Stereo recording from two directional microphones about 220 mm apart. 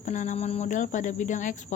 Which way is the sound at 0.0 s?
35° left (ahead or behind).